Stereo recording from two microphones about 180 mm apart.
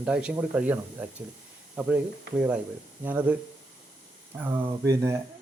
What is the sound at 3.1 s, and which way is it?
Speech, 10° right (ahead or behind).